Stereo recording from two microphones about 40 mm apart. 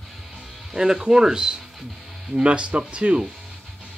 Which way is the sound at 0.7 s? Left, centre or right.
Centre.